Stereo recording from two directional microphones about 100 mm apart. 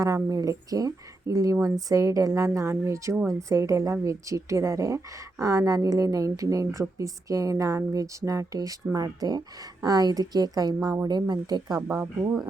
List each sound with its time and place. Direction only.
0.0 s a woman's voice: 35° right (ahead or behind)
11.8 s a woman's voice: 30° right (ahead or behind)